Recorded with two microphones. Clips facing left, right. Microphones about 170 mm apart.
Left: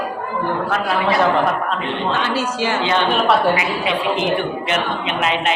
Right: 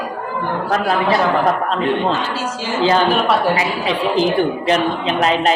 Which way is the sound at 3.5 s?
35° right (ahead or behind).